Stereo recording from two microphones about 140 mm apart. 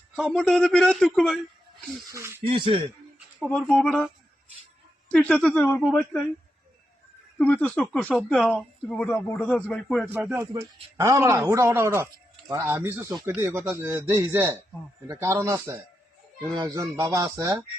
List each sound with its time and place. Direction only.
0.2 s a man's voice: 5° left (ahead or behind)
2.1 s a man's voice: 20° right (ahead or behind)
2.5 s speech: 40° right (ahead or behind)
3.5 s speech: 10° left (ahead or behind)
7.3 s speech: 10° left (ahead or behind)
10.1 s a man's voice: 15° right (ahead or behind)